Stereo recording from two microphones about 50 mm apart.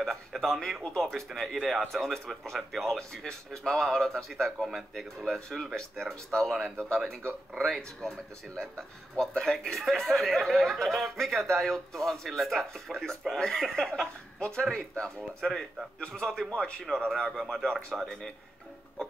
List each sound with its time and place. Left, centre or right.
0.0 s speech: centre